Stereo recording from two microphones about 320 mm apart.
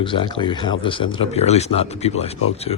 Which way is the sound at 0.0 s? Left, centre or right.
Centre.